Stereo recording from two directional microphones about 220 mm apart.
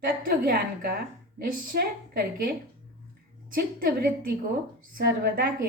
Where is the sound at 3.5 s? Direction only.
40° right (ahead or behind).